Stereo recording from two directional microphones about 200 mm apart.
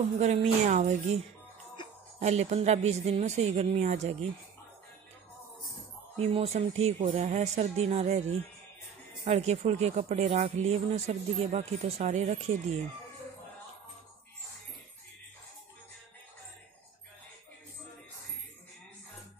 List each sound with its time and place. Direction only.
0.2 s speech: 35° right (ahead or behind)
2.1 s speech: 30° right (ahead or behind)
6.1 s speech: 30° right (ahead or behind)
9.2 s speech: 35° right (ahead or behind)